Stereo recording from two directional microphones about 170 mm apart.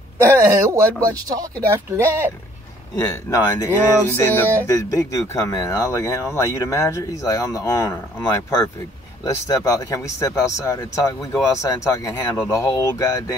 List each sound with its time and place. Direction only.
0.2 s speech: 15° right (ahead or behind)
3.0 s speech: 20° left (ahead or behind)
4.2 s music: 15° left (ahead or behind)
4.6 s speech: 20° left (ahead or behind)